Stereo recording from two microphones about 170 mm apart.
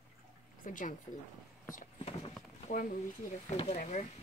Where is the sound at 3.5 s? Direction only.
40° left (ahead or behind).